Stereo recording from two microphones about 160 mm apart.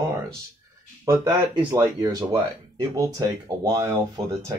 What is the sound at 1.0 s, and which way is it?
Speech, 20° right (ahead or behind).